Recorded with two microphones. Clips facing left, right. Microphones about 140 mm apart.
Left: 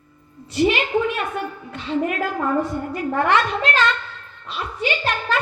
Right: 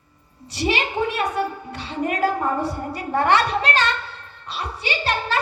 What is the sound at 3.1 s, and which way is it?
A woman's voice, 35° right (ahead or behind).